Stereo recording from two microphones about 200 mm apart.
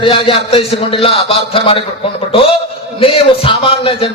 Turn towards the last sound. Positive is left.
turn(degrees=30)  # may be behind; listen again after turning